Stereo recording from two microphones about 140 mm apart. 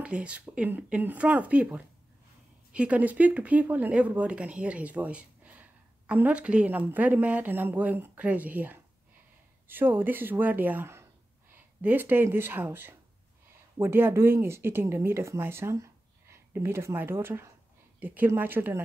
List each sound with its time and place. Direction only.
0.0 s speech: 10° right (ahead or behind)